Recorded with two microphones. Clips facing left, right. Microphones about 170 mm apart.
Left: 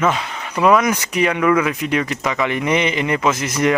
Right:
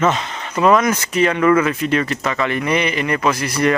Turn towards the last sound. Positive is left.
turn(degrees=20)  # may be behind; listen again after turning